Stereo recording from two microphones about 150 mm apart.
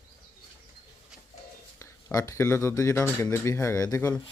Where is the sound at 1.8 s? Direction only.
20° left (ahead or behind).